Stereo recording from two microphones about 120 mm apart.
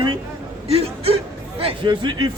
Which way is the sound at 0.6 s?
55° right (ahead or behind).